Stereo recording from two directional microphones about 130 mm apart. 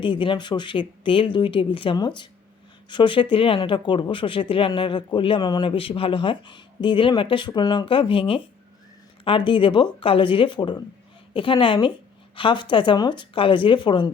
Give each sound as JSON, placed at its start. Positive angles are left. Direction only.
{"t": 0.0, "sound": "speech", "side_deg": 40}